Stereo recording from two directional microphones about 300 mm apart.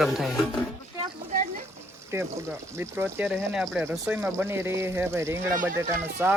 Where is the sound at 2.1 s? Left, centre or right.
Centre.